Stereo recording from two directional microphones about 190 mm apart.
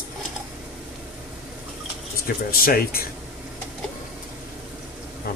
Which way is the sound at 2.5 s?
50° left (ahead or behind).